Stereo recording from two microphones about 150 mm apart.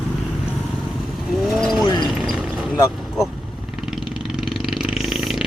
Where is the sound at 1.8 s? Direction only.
30° left (ahead or behind).